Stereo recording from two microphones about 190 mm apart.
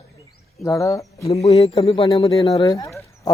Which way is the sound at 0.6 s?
15° left (ahead or behind).